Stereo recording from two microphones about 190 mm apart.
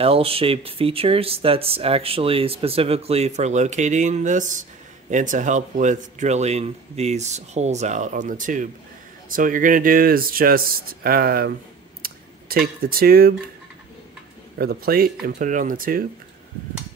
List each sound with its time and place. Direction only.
0.0 s speech: 30° right (ahead or behind); by 11.5 s 50° right (ahead or behind)
12.0 s a sound: 50° right (ahead or behind)
14.6 s speech: 55° right (ahead or behind)